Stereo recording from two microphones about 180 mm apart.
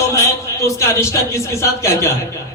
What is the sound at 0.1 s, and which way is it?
A man's voice, 15° left (ahead or behind).